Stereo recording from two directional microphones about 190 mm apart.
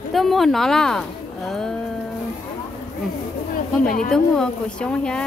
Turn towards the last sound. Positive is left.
turn(degrees=5)  # may be behind; listen again after turning